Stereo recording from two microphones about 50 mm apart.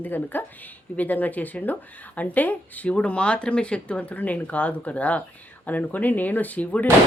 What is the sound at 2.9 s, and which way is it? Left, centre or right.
Speech, left.